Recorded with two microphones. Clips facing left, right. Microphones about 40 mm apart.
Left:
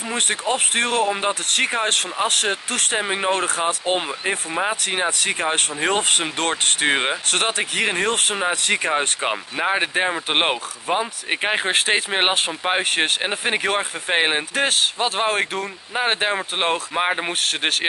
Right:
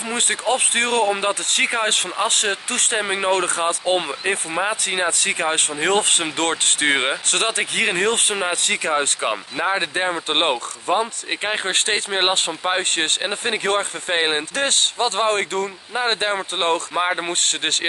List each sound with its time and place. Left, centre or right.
0.1 s speech: centre
8.6 s speech: centre
16.0 s speech: left